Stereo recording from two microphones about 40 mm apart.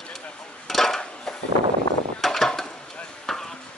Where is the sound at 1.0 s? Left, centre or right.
Left.